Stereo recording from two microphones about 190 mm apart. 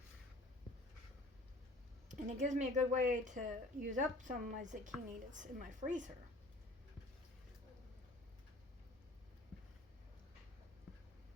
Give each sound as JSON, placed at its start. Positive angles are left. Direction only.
{"t": 2.0, "sound": "a woman's voice", "side_deg": -40}